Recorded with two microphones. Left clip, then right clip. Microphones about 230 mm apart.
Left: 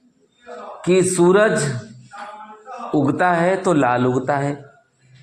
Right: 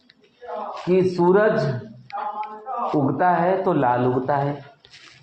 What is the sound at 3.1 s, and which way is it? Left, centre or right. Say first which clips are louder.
A man's voice: left 2 dB; left.